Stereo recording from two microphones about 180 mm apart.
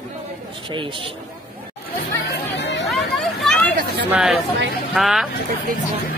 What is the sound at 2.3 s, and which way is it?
Chatter, 75° left (ahead or behind).